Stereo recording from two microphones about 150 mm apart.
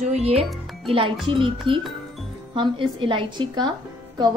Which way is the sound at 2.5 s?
30° right (ahead or behind).